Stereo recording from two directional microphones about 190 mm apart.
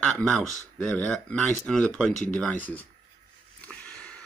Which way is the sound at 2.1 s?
40° left (ahead or behind).